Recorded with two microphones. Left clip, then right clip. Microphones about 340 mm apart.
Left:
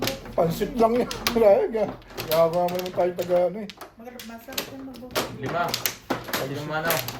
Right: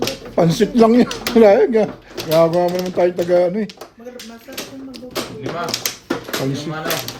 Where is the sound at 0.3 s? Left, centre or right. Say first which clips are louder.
Right 9 dB; right.